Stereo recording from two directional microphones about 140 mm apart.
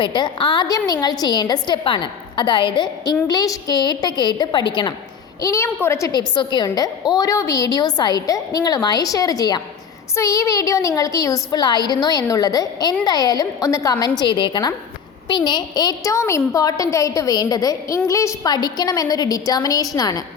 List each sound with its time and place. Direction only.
0.0 s a woman's voice: 35° left (ahead or behind)
5.4 s a woman's voice: 20° left (ahead or behind)
14.2 s a woman's voice: 35° left (ahead or behind)